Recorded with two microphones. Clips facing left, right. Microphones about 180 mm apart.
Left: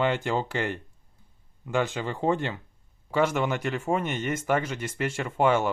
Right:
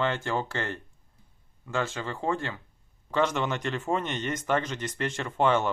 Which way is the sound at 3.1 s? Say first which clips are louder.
Left 2 dB; 10° left (ahead or behind).